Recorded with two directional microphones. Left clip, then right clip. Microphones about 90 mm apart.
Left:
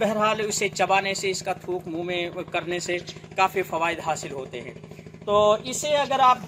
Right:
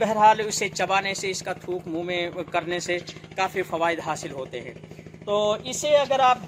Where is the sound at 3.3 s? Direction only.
25° right (ahead or behind).